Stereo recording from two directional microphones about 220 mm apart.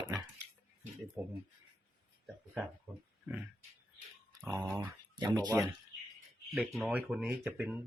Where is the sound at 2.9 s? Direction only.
10° right (ahead or behind).